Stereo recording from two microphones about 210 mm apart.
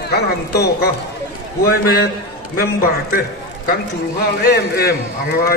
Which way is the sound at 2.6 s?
45° left (ahead or behind).